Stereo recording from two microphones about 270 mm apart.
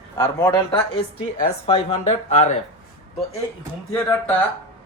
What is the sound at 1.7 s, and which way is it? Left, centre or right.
Speech, left.